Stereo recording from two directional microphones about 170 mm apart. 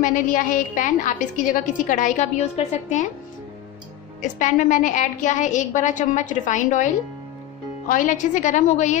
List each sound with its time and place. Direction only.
0.0 s a woman's voice: 50° left (ahead or behind)
4.2 s a woman's voice: 45° left (ahead or behind)
7.9 s a woman's voice: 50° left (ahead or behind)